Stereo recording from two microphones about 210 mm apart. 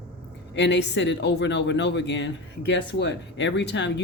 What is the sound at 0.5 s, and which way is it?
Speech, 55° left (ahead or behind).